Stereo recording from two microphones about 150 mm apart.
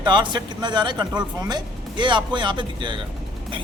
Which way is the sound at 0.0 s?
30° right (ahead or behind).